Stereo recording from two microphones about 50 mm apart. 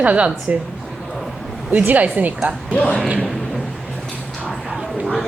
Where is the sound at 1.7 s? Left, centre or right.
Right.